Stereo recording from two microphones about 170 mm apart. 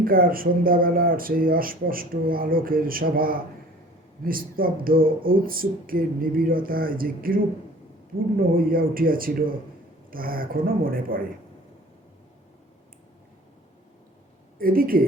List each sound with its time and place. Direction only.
0.0 s speech: 60° right (ahead or behind)
14.6 s speech: 60° right (ahead or behind)